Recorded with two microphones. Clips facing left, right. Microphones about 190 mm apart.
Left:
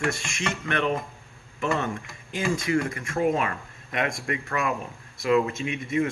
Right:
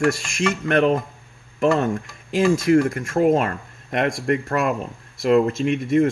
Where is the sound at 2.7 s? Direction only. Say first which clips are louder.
Right 8 dB; 50° right (ahead or behind).